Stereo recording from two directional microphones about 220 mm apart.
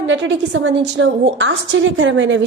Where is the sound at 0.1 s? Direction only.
55° right (ahead or behind).